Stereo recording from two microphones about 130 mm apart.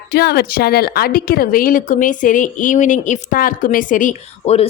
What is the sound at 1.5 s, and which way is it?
Speech, 90° left.